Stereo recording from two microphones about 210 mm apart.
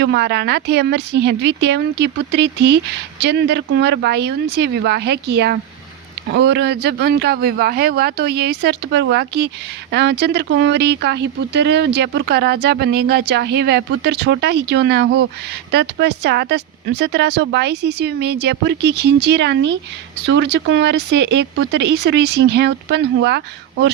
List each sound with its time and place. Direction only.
0.0 s speech: 55° right (ahead or behind)